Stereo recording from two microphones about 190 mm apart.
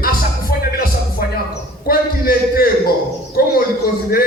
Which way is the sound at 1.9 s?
50° left (ahead or behind).